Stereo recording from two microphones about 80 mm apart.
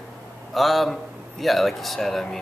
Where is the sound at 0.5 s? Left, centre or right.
Centre.